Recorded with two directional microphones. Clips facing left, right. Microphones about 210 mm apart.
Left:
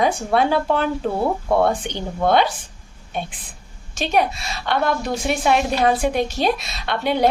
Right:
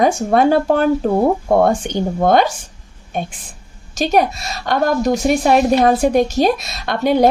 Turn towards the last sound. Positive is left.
turn(degrees=-45)  # may be behind; listen again after turning